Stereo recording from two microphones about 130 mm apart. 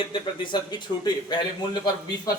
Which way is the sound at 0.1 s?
35° left (ahead or behind).